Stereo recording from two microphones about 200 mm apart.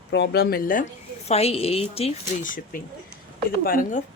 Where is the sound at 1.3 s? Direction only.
30° left (ahead or behind).